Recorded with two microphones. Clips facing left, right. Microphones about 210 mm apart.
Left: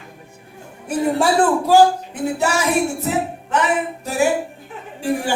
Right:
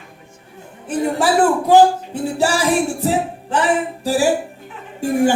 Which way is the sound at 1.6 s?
20° right (ahead or behind).